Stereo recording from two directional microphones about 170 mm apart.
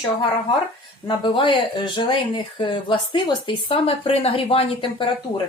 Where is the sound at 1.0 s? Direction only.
30° left (ahead or behind).